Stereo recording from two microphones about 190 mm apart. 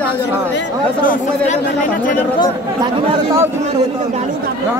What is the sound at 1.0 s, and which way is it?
Speech, 45° left (ahead or behind).